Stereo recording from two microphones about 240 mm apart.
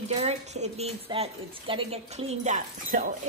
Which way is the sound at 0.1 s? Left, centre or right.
Right.